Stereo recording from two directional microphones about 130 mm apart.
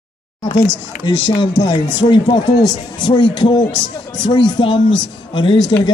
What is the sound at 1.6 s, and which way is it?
Speech, 35° left (ahead or behind).